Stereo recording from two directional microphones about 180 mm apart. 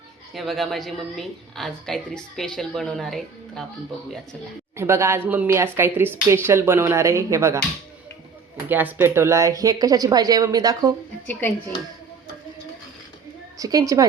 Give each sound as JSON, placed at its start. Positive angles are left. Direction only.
{"t": 0.3, "sound": "a woman's voice", "side_deg": 0}
{"t": 4.8, "sound": "speech", "side_deg": -15}
{"t": 8.7, "sound": "speech", "side_deg": -10}
{"t": 11.3, "sound": "speech", "side_deg": 10}
{"t": 13.6, "sound": "speech", "side_deg": -20}